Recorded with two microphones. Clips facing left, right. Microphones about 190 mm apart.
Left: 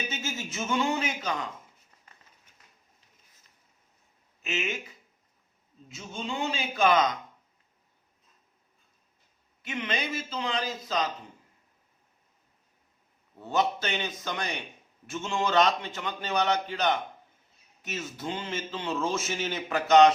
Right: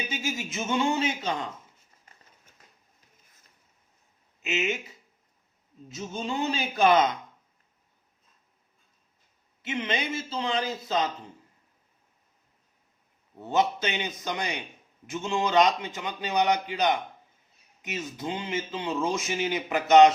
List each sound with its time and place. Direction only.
0.1 s a man's voice: 10° right (ahead or behind)
4.4 s a man's voice: 20° right (ahead or behind)
5.9 s a man's voice: 40° right (ahead or behind)
9.6 s a man's voice: 20° right (ahead or behind)
13.4 s a man's voice: 20° right (ahead or behind)